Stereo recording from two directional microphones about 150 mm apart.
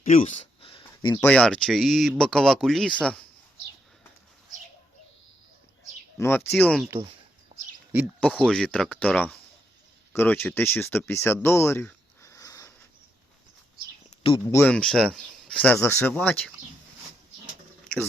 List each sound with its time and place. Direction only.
0.0 s speech: 60° left (ahead or behind)
0.6 s a sound: 35° left (ahead or behind)
1.2 s speech: 5° left (ahead or behind)
6.1 s speech: 15° left (ahead or behind)
6.5 s speech: 5° left (ahead or behind)
7.5 s bird: 40° right (ahead or behind)
8.2 s speech: 5° left (ahead or behind); by 12.7 s 20° left (ahead or behind)
14.4 s speech: 15° left (ahead or behind)